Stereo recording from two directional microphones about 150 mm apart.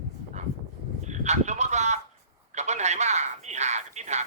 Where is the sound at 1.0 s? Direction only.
50° right (ahead or behind).